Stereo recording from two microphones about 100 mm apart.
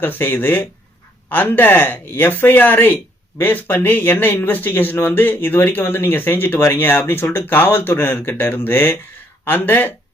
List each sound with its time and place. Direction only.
0.0 s speech: 20° left (ahead or behind)